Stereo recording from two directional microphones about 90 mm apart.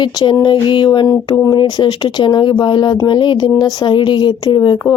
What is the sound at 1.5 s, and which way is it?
Speech, 55° left (ahead or behind).